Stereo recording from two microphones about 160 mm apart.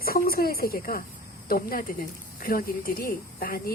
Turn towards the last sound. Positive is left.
turn(degrees=65)  # may be behind; listen again after turning